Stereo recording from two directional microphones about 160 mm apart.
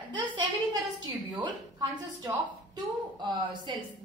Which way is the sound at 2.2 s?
25° right (ahead or behind).